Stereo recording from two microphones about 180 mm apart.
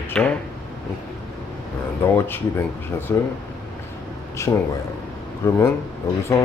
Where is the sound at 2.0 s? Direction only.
15° left (ahead or behind).